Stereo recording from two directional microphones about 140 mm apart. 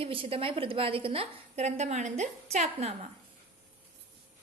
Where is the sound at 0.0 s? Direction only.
40° right (ahead or behind).